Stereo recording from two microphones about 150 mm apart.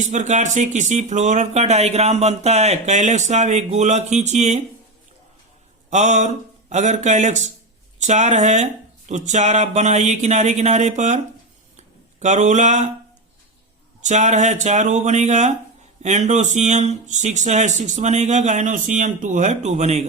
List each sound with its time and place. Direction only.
0.0 s speech: 55° right (ahead or behind)
5.9 s speech: 55° right (ahead or behind)
12.2 s speech: 50° right (ahead or behind)
14.0 s speech: 50° right (ahead or behind)